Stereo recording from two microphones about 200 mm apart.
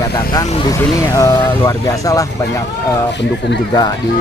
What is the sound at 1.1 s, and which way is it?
Speech, 15° left (ahead or behind).